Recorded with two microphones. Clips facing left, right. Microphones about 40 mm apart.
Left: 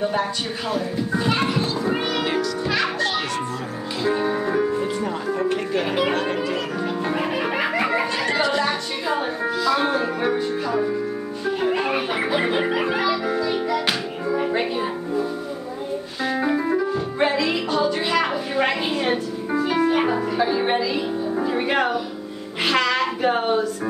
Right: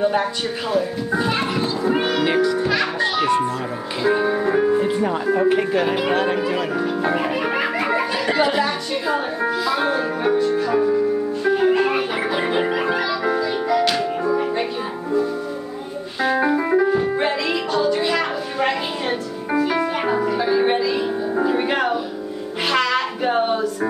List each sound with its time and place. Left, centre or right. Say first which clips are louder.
1.1 s speech: right 2 dB; centre
1.5 s children playing: right 2 dB; centre
2.2 s music: right 5 dB; right
4.0 s music: right 3 dB; centre
5.5 s speech: right 4 dB; centre
7.3 s music: right 1 dB; centre
8.3 s speech: right 4 dB; centre
8.6 s a capella: right 1 dB; centre
9.8 s music: right 1 dB; centre
16.6 s music: right 5 dB; right
17.2 s music: even; centre